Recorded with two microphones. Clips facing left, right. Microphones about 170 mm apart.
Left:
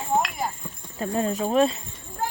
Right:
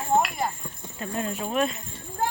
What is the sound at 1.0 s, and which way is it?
Speech, 35° left (ahead or behind).